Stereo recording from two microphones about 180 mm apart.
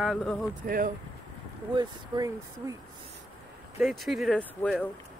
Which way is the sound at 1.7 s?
20° right (ahead or behind).